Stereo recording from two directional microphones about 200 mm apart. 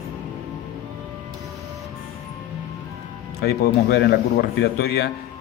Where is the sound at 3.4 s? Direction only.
55° left (ahead or behind).